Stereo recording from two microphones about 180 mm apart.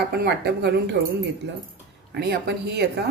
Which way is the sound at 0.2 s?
65° right (ahead or behind).